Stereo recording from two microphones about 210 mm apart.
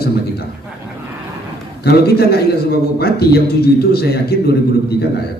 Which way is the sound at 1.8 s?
50° left (ahead or behind).